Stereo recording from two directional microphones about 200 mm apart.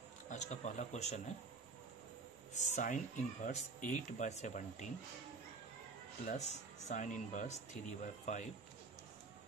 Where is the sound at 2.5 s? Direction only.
35° left (ahead or behind).